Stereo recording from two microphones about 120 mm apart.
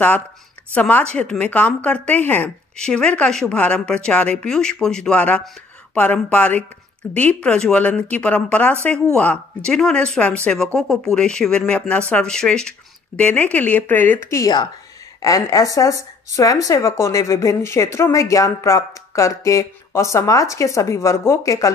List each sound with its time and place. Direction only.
0.7 s speech: 15° left (ahead or behind)